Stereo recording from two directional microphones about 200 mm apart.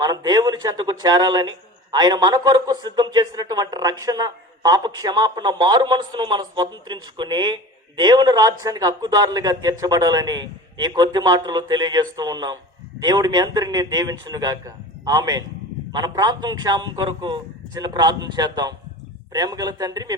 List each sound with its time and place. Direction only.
0.0 s a man's voice: 20° right (ahead or behind)